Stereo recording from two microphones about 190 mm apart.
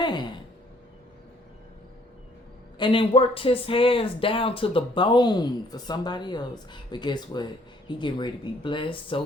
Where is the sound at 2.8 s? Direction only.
25° left (ahead or behind).